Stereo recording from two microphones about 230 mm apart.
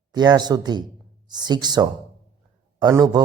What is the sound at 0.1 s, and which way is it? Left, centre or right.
A man's voice, centre.